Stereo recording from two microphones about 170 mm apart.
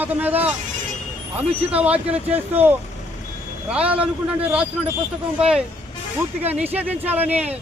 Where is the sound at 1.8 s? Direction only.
10° right (ahead or behind).